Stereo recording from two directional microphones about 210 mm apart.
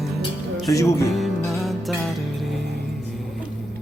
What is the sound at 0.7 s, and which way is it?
Music, 15° left (ahead or behind).